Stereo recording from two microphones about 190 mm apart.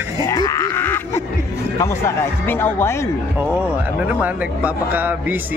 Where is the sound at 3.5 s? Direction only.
10° right (ahead or behind).